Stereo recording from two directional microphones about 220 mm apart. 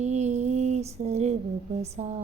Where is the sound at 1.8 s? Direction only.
30° right (ahead or behind).